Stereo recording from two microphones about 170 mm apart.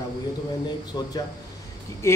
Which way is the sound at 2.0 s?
15° left (ahead or behind).